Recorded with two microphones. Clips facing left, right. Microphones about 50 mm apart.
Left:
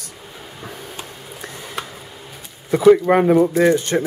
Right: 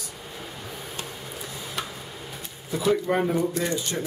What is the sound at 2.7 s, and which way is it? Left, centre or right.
Speech, left.